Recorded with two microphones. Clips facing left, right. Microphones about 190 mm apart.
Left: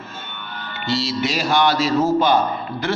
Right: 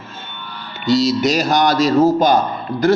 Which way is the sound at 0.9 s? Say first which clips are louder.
Right 8 dB; 40° right (ahead or behind).